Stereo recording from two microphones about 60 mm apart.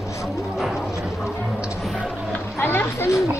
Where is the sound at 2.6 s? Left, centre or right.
Left.